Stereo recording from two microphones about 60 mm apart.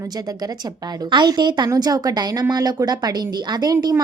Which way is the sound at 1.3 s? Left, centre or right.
Right.